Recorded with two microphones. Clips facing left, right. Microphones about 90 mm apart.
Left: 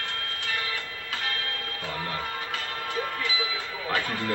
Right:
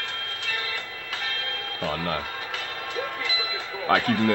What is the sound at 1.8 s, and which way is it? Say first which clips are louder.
Speech: right 6 dB; 75° right (ahead or behind).